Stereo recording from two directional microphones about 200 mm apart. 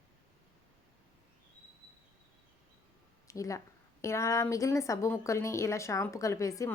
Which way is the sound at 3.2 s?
15° left (ahead or behind).